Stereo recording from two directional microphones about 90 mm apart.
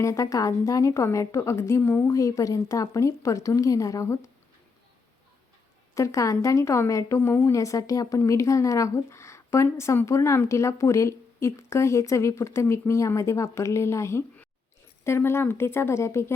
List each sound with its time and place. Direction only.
0.0 s a woman's voice: 35° left (ahead or behind)
5.9 s a woman's voice: 35° left (ahead or behind)